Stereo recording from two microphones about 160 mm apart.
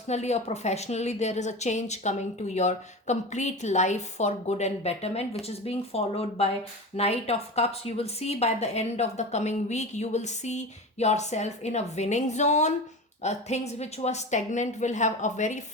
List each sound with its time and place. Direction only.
0.1 s a woman's voice: 45° left (ahead or behind)